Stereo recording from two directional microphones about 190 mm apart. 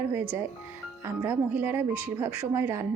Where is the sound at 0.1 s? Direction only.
10° right (ahead or behind).